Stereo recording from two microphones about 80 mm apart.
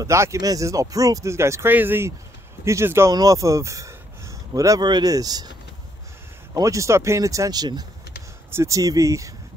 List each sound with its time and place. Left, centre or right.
0.0 s speech: right
1.7 s speech: right
3.1 s speech: right
4.8 s speech: right
5.1 s speech: right
6.5 s speech: right
8.5 s speech: right
8.7 s speech: right